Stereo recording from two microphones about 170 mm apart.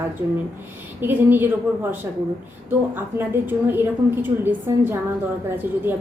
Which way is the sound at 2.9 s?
10° right (ahead or behind).